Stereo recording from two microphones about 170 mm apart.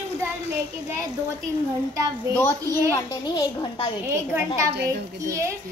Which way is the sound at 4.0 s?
15° right (ahead or behind).